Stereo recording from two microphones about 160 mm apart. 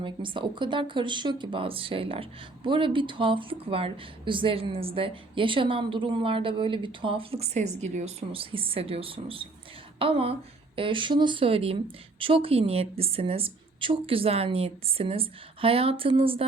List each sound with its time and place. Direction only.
0.0 s a woman's voice: 30° right (ahead or behind)